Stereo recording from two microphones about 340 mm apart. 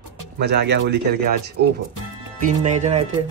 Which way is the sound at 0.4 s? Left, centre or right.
Right.